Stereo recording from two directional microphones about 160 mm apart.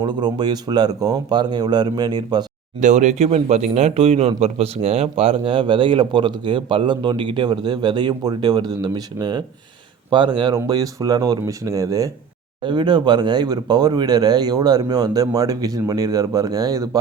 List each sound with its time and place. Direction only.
0.0 s speech: 25° right (ahead or behind)
2.8 s speech: 50° right (ahead or behind); by 17.0 s 25° right (ahead or behind)